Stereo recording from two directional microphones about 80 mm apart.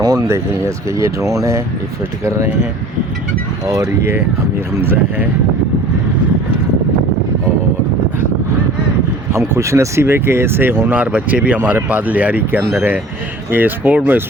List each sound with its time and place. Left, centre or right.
0.0 s a sound: right
0.3 s speech: right
3.7 s speech: right
4.8 s speech: right
9.3 s speech: right